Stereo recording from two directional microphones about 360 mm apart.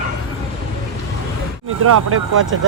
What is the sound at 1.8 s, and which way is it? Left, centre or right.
Speech, right.